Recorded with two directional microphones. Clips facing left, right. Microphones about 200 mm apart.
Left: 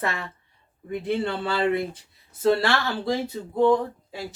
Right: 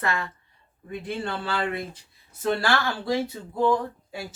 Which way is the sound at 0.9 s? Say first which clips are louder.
Left 5 dB; 25° left (ahead or behind).